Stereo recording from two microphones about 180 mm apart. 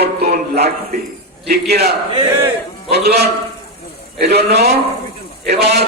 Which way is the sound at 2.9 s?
60° right (ahead or behind).